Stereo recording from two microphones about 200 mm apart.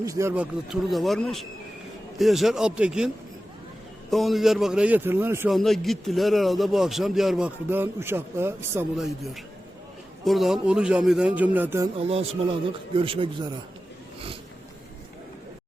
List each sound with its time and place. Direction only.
0.0 s speech: 15° right (ahead or behind)
0.7 s a man's voice: centre (ahead or behind)
4.1 s a man's voice: centre (ahead or behind)
5.5 s a man's voice: centre (ahead or behind)
9.0 s a man's voice: centre (ahead or behind)
11.9 s speech: 30° right (ahead or behind)